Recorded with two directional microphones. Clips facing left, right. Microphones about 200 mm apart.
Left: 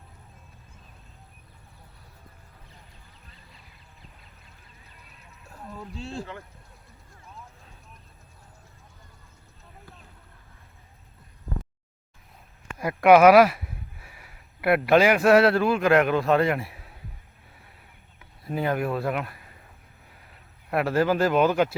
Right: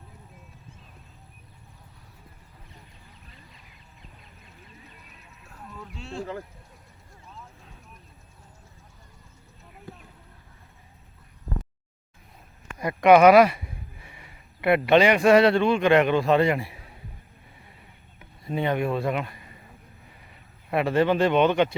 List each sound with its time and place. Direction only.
5.9 s speech: 35° left (ahead or behind)
12.8 s speech: 5° left (ahead or behind)
18.4 s speech: centre (ahead or behind)
20.1 s a sound: centre (ahead or behind)